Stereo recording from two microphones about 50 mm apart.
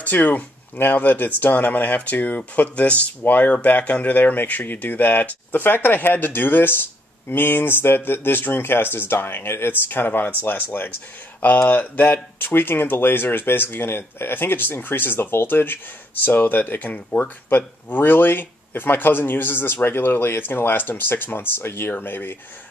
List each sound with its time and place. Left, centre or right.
0.0 s speech: left
17.5 s speech: left